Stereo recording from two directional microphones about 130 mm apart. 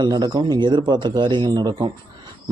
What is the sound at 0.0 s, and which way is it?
Speech, 35° right (ahead or behind).